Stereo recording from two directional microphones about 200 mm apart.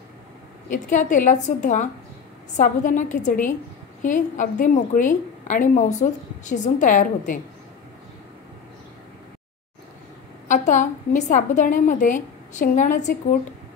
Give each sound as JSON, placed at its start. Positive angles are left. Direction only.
{"t": 0.7, "sound": "a woman's voice", "side_deg": 40}
{"t": 10.5, "sound": "a woman's voice", "side_deg": 40}